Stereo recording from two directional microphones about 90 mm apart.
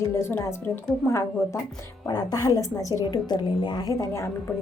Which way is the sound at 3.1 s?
50° left (ahead or behind).